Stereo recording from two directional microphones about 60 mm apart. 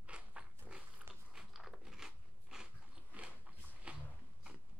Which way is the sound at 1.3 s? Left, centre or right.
Centre.